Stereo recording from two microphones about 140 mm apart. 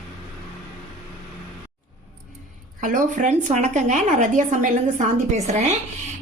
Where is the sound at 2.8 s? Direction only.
65° right (ahead or behind).